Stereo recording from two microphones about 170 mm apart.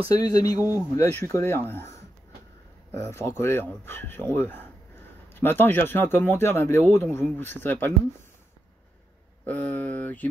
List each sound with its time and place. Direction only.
0.1 s speech: 20° left (ahead or behind)
0.6 s speech: 10° right (ahead or behind)
0.9 s speech: 15° left (ahead or behind)
2.9 s speech: 15° left (ahead or behind)
9.5 s speech: 10° left (ahead or behind)